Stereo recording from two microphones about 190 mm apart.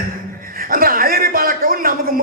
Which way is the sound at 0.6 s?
50° right (ahead or behind).